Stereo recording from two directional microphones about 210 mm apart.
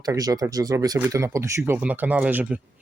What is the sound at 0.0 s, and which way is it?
Speech, 15° right (ahead or behind).